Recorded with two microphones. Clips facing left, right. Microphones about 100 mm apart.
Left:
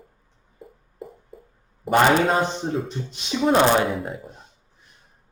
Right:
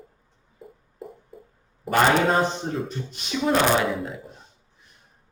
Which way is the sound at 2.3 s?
5° left (ahead or behind).